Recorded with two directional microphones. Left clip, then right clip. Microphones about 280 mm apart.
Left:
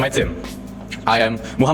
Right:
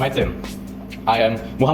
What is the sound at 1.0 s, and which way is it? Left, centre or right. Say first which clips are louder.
Speech: even; left.